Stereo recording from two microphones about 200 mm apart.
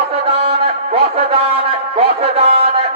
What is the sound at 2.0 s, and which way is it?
Music, 30° right (ahead or behind).